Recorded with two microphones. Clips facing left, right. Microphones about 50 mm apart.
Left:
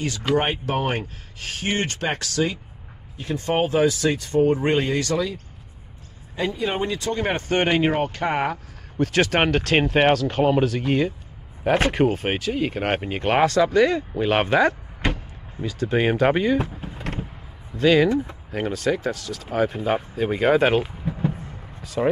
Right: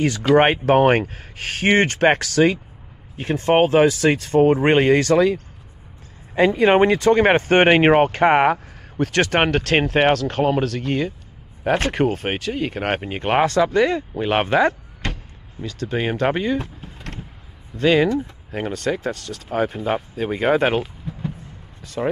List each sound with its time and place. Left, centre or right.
0.4 s speech: right
9.0 s speech: centre
14.7 s door: centre
15.6 s speech: centre
16.5 s vehicle: centre
18.5 s speech: centre
20.8 s a sound: centre
21.8 s speech: centre